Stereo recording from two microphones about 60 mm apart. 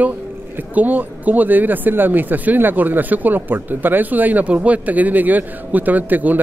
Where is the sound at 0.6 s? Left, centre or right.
Right.